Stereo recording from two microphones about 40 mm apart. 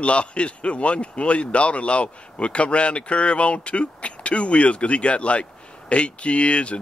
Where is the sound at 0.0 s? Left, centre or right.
Left.